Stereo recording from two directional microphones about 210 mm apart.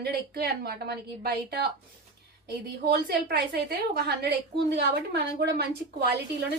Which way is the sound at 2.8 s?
50° right (ahead or behind).